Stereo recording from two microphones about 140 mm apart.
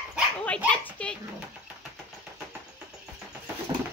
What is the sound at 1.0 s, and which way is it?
Speech, 10° left (ahead or behind).